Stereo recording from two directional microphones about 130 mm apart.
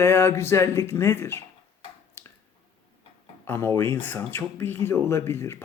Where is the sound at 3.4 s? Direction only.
20° left (ahead or behind).